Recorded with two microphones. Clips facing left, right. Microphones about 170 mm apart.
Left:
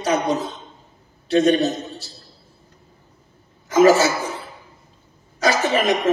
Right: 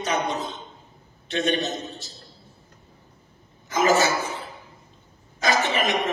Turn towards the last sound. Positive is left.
turn(degrees=35)  # may be behind; listen again after turning